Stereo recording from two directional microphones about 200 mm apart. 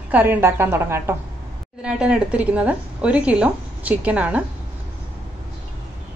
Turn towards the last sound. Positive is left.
turn(degrees=-5)  # may be behind; listen again after turning